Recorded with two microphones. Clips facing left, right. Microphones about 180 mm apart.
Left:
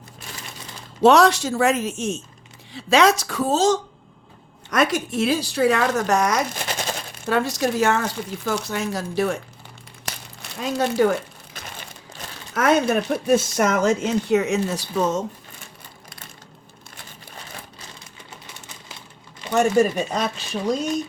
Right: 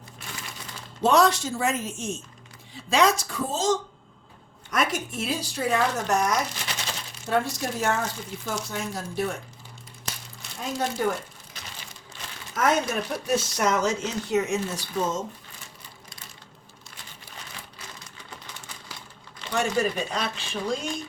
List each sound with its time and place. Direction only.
1.0 s speech: 75° left (ahead or behind)
6.5 s machine gun: 50° left (ahead or behind)
7.3 s speech: 90° left
10.6 s speech: 80° left
19.5 s speech: 45° left (ahead or behind)